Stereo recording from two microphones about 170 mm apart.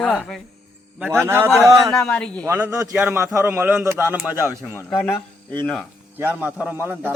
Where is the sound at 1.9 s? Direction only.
5° left (ahead or behind).